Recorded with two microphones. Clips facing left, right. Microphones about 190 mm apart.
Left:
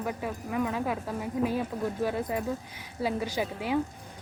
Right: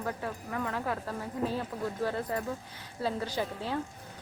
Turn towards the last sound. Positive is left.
turn(degrees=10)  # may be behind; listen again after turning